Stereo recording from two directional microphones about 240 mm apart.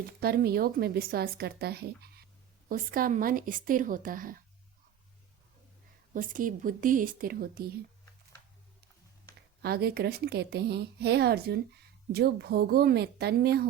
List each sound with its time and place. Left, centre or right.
0.2 s a woman's voice: right
6.1 s a woman's voice: right
9.6 s a woman's voice: right